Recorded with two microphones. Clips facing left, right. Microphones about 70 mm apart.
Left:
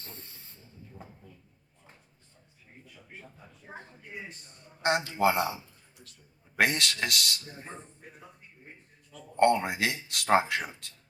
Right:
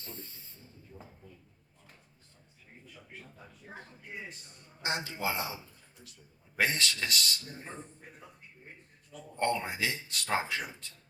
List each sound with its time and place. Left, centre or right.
4.1 s a sound: centre
4.8 s a man's voice: left
6.6 s speech: left
9.4 s speech: left